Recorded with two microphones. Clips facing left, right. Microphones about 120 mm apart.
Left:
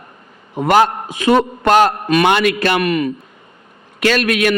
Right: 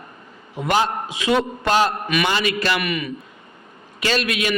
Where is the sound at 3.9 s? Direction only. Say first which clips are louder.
Left 7 dB; 55° left (ahead or behind).